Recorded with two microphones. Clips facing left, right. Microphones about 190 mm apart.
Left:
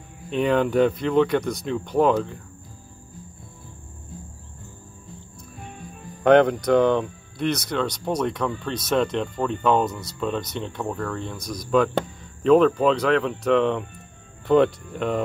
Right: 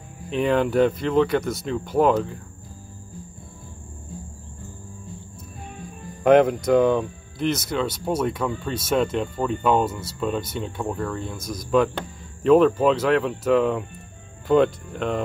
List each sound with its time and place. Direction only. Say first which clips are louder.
0.3 s speech: even; centre (ahead or behind)
6.2 s speech: even; centre (ahead or behind)